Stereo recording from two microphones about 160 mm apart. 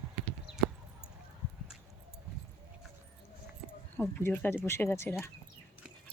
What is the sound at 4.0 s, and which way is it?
Speech, 10° left (ahead or behind).